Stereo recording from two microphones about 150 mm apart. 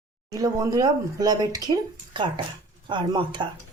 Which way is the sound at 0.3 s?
25° right (ahead or behind).